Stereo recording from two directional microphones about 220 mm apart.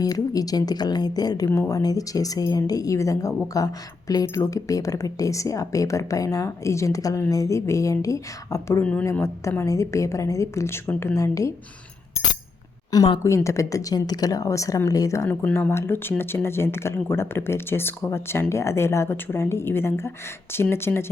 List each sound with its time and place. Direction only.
0.0 s speech: 15° left (ahead or behind)
12.9 s speech: 15° left (ahead or behind)